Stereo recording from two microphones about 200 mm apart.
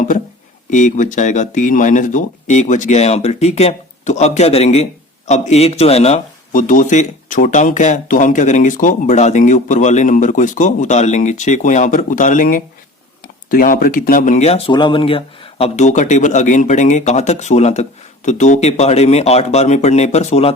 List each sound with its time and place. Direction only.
0.7 s speech: 40° left (ahead or behind)